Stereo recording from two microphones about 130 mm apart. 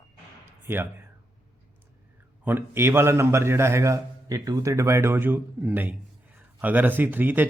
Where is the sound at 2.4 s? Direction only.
15° right (ahead or behind).